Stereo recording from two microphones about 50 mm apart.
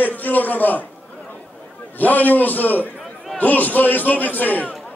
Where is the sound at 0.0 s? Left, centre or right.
Left.